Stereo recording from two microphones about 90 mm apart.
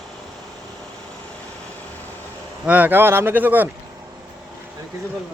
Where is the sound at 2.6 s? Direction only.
20° right (ahead or behind).